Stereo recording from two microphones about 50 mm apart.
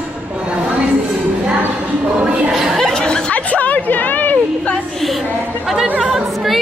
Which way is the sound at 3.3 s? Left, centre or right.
Left.